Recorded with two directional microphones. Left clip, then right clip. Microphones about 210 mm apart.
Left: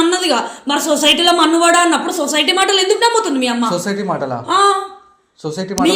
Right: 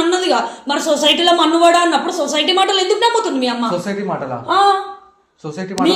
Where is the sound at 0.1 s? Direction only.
50° left (ahead or behind).